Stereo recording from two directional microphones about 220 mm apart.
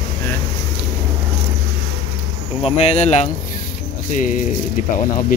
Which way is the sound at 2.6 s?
30° left (ahead or behind).